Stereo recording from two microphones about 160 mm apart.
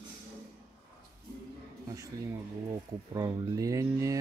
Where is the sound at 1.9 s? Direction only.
20° right (ahead or behind).